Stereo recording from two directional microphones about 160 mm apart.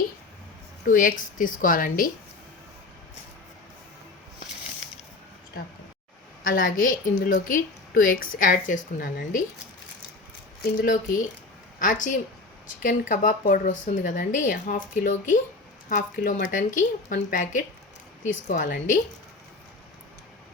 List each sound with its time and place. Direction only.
0.9 s a woman's voice: 60° left (ahead or behind)
6.4 s a woman's voice: 60° left (ahead or behind)
10.6 s a woman's voice: 60° left (ahead or behind)